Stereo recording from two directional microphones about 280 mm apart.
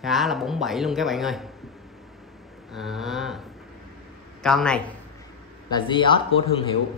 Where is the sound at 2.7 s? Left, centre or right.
Centre.